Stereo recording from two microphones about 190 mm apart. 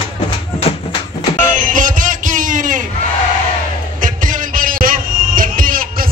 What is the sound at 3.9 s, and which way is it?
Music, 45° right (ahead or behind).